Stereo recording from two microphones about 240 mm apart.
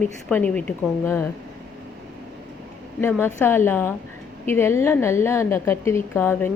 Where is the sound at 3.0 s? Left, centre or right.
Centre.